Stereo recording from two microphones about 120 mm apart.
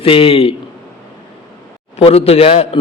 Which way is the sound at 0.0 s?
50° left (ahead or behind).